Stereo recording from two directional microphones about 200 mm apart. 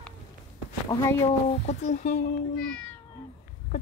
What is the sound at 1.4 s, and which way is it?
Speech, 30° left (ahead or behind).